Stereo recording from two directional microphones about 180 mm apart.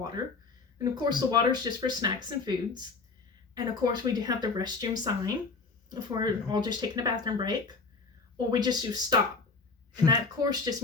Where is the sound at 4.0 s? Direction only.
20° right (ahead or behind).